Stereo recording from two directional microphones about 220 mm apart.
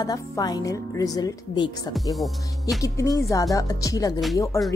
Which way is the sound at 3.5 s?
15° left (ahead or behind).